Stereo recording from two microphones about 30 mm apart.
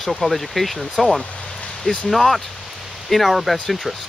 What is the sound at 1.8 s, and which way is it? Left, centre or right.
Speech, left.